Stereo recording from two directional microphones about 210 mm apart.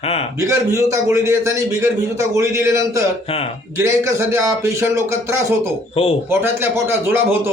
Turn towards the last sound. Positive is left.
turn(degrees=-10)  # may be behind; listen again after turning